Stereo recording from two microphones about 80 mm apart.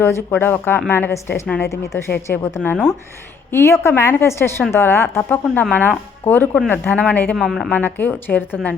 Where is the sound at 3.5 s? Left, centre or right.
Left.